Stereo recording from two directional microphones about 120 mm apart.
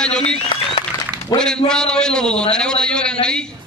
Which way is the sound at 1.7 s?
5° left (ahead or behind).